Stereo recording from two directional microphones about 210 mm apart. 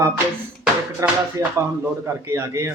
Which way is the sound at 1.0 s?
15° right (ahead or behind).